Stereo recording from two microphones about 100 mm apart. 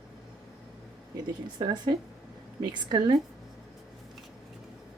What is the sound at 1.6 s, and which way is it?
Speech, 45° right (ahead or behind).